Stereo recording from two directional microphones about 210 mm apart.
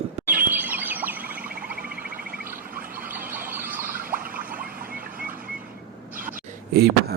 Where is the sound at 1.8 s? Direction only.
45° right (ahead or behind).